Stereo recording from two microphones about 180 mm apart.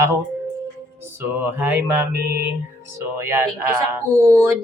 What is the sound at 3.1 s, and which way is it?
Speech, 15° right (ahead or behind).